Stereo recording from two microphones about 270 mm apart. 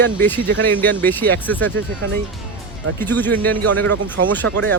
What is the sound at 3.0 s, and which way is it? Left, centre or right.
Speech, centre.